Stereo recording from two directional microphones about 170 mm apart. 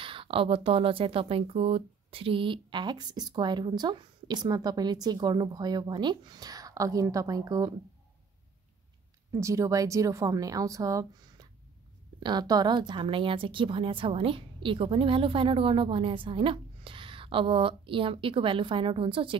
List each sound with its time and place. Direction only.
0.0 s speech: 30° right (ahead or behind)
9.3 s a woman's voice: 20° right (ahead or behind)